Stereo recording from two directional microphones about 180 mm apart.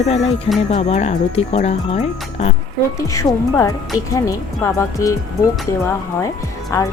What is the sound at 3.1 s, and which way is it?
Speech, 15° left (ahead or behind).